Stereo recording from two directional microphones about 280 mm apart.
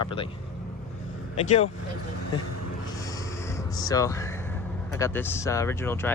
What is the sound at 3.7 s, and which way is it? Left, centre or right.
Speech, centre.